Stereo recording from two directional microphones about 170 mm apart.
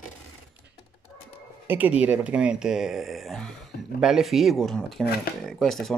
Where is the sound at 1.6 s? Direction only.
10° right (ahead or behind).